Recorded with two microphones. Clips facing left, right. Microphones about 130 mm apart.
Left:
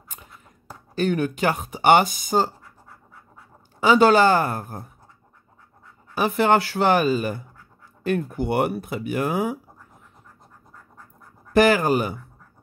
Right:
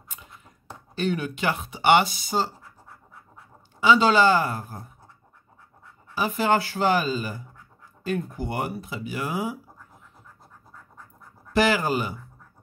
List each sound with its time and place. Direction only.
0.9 s speech: 45° left (ahead or behind)
3.8 s speech: 50° left (ahead or behind)
6.1 s speech: 60° left (ahead or behind)
11.5 s speech: 55° left (ahead or behind)